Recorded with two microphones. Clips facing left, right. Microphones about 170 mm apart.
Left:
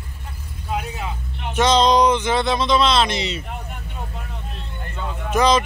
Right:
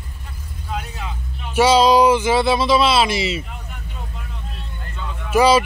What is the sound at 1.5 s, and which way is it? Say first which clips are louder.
Speech: right 3 dB; 5° right (ahead or behind).